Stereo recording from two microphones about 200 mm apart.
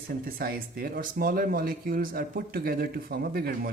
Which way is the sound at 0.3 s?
50° right (ahead or behind).